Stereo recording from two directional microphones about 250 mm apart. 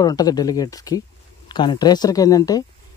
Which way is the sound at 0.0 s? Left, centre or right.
Centre.